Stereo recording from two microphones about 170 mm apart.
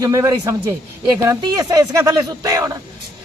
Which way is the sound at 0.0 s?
20° right (ahead or behind).